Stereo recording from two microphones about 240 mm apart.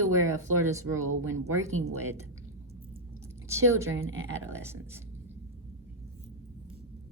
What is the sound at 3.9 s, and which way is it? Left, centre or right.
Speech, right.